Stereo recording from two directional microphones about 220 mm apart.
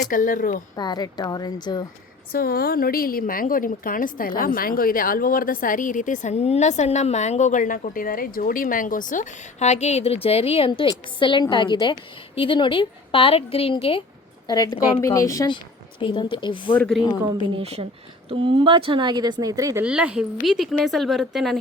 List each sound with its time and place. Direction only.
0.1 s a woman's voice: 35° left (ahead or behind)
0.8 s a woman's voice: 20° left (ahead or behind)
2.3 s a woman's voice: 45° left (ahead or behind); by 16.7 s 20° left (ahead or behind)
16.7 s a woman's voice: 5° left (ahead or behind)
17.5 s a woman's voice: 25° right (ahead or behind); by 21.6 s centre (ahead or behind)